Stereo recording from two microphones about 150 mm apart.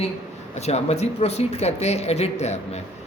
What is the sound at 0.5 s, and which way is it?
Speech, 45° left (ahead or behind).